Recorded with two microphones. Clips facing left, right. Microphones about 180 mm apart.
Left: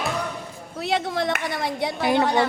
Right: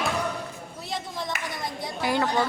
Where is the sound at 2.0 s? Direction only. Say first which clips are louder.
Left 4 dB; 20° left (ahead or behind).